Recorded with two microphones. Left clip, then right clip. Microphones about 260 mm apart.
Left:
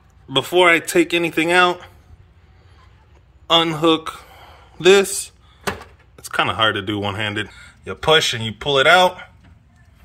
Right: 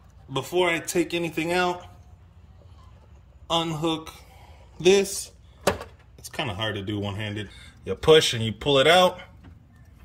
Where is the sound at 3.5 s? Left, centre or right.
Left.